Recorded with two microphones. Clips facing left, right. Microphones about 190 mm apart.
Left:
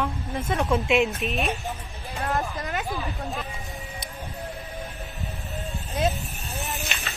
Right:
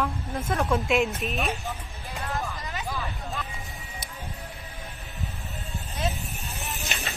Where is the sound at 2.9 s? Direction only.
15° left (ahead or behind).